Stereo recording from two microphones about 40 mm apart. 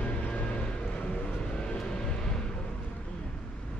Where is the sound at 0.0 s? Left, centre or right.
Left.